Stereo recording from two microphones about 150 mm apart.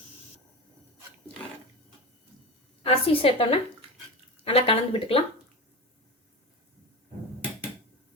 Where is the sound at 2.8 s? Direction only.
40° left (ahead or behind).